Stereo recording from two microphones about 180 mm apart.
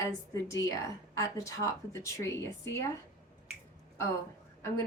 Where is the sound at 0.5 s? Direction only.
20° left (ahead or behind).